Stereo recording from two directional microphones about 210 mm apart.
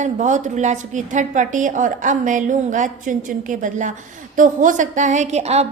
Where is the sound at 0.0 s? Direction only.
35° right (ahead or behind).